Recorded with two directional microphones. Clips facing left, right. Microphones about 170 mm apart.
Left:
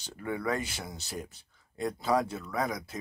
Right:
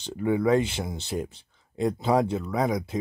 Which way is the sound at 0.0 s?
25° right (ahead or behind).